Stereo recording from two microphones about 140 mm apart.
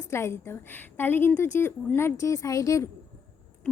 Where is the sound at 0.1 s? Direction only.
20° left (ahead or behind).